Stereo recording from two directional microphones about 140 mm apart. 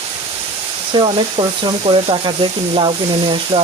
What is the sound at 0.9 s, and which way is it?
Speech, 35° right (ahead or behind).